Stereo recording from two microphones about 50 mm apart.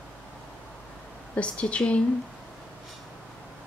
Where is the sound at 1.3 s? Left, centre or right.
Left.